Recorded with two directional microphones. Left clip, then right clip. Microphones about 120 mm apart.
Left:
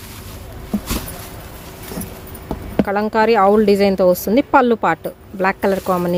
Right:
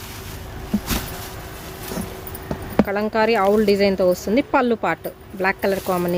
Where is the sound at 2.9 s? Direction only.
30° left (ahead or behind).